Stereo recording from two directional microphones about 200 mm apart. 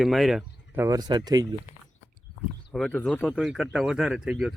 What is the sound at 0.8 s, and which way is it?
Speech, 20° right (ahead or behind).